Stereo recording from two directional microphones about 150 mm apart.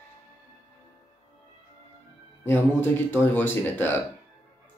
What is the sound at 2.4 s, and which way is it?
Speech, 15° left (ahead or behind).